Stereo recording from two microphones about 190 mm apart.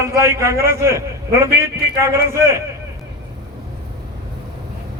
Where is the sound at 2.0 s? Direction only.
15° right (ahead or behind).